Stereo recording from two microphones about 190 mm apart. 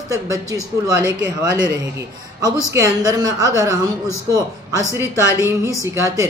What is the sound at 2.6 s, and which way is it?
Speech, 15° right (ahead or behind).